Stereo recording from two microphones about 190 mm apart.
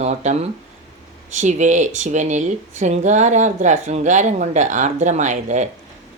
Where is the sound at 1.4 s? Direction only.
40° right (ahead or behind).